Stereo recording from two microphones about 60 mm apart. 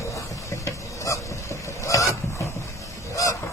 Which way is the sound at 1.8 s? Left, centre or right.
Left.